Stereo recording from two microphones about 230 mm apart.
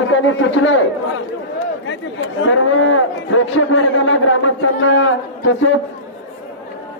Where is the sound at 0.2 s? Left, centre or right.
Left.